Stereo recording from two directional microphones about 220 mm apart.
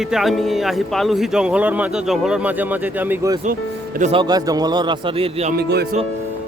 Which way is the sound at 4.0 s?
25° right (ahead or behind).